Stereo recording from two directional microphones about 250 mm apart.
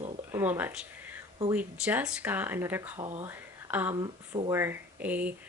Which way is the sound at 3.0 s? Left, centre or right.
Right.